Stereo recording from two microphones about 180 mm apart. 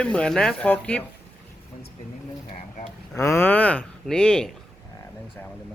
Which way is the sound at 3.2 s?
15° left (ahead or behind).